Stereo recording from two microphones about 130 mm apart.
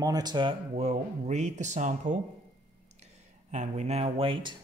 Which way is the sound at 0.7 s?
60° right (ahead or behind).